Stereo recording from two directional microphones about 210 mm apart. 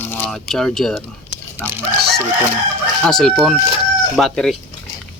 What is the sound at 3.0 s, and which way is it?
Speech, 5° left (ahead or behind).